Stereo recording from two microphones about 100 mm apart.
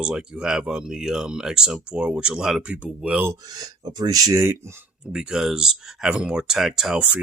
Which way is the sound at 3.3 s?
40° right (ahead or behind).